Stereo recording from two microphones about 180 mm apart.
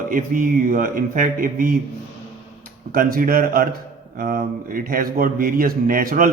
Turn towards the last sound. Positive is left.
turn(degrees=-50)  # may be behind; listen again after turning